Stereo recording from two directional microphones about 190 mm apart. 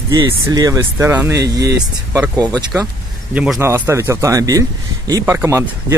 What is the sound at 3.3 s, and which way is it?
Speech, 5° right (ahead or behind).